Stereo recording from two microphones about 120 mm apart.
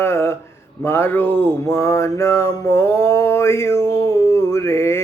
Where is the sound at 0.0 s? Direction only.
20° left (ahead or behind).